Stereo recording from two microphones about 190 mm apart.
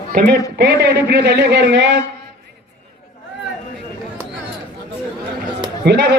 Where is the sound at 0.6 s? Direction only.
60° right (ahead or behind).